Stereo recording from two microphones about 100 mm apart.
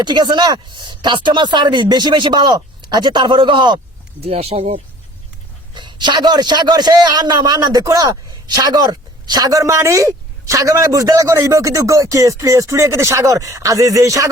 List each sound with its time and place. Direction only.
0.0 s speech: 50° right (ahead or behind)
4.2 s speech: 90° right
5.7 s a man's voice: 50° right (ahead or behind); by 14.3 s 35° right (ahead or behind)